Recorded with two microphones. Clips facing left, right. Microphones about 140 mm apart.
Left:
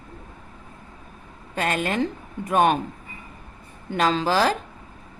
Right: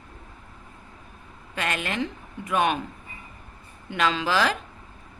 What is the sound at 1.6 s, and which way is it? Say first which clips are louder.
A woman's voice: left 5 dB; 40° left (ahead or behind).